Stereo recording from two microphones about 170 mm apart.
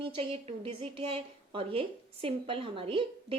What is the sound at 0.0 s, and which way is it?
A woman's voice, 30° right (ahead or behind).